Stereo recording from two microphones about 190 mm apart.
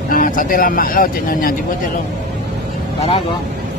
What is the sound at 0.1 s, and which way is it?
Speech, 45° left (ahead or behind).